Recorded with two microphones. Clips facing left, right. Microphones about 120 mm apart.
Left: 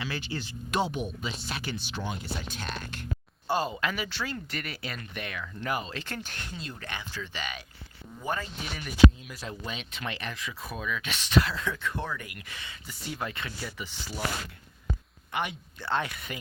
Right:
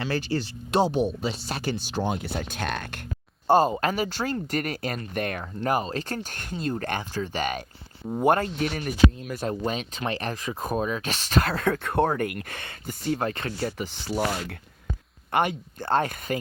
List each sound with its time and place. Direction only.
0.0 s speech: 40° right (ahead or behind)
2.1 s speech: 60° right (ahead or behind)
8.1 s speech: 60° right (ahead or behind); by 14.2 s 40° right (ahead or behind)
15.3 s speech: 50° right (ahead or behind)